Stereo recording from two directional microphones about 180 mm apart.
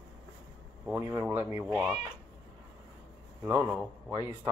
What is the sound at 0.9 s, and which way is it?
Speech, 15° right (ahead or behind).